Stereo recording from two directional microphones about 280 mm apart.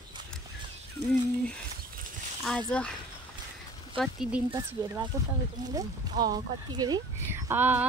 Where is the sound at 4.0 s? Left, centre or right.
Centre.